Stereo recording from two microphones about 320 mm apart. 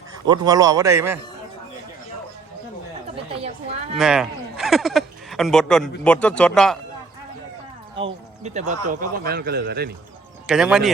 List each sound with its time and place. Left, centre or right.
0.3 s a man's voice: centre
3.9 s speech: centre
7.9 s a man's voice: centre
10.4 s speech: centre